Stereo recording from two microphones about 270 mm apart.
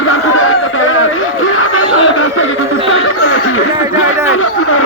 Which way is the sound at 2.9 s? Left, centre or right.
Left.